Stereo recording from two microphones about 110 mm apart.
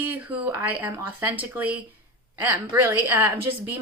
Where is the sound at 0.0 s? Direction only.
15° right (ahead or behind).